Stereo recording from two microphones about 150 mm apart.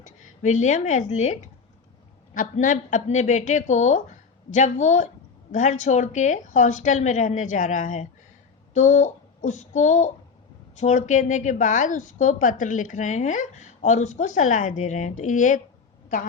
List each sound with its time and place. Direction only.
0.0 s a woman's voice: 55° left (ahead or behind)
8.7 s child singing: 55° left (ahead or behind)
10.8 s a woman's voice: 50° left (ahead or behind)